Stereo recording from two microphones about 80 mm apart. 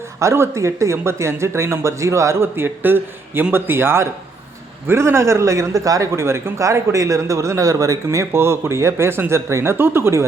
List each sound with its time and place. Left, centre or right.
0.2 s a man's voice: right